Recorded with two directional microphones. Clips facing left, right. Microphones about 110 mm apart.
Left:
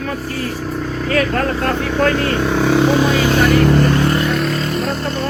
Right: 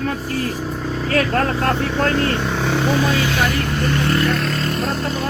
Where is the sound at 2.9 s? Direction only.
25° left (ahead or behind).